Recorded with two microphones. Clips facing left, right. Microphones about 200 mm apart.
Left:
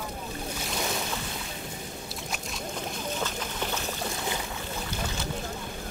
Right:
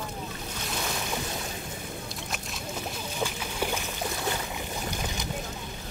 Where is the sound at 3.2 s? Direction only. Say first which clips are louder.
Right 2 dB; 10° right (ahead or behind).